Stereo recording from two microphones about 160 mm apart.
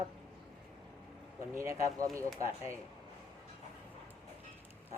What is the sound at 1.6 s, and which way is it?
Speech, 20° right (ahead or behind).